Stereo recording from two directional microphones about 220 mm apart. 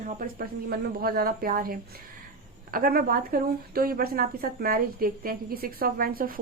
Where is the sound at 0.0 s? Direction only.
40° right (ahead or behind).